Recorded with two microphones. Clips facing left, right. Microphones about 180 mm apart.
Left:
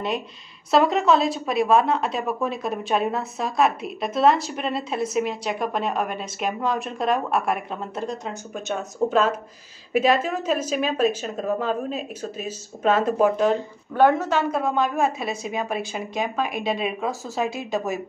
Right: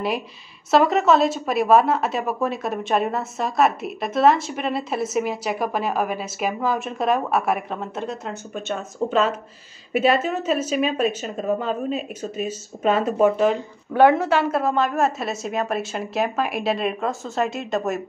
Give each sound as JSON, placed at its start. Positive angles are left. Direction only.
{"t": 0.7, "sound": "a woman's voice", "side_deg": 0}